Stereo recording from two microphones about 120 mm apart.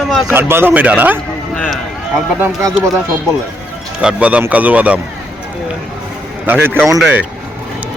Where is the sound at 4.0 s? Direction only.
10° right (ahead or behind).